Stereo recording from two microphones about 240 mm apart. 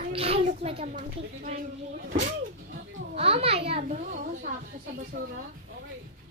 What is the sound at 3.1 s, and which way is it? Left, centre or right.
Female singing, right.